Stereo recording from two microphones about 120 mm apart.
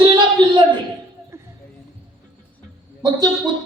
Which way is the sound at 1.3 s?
25° right (ahead or behind).